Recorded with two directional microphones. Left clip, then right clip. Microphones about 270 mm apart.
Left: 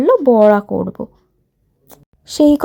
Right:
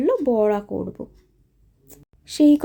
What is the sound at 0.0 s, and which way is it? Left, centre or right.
Speech, centre.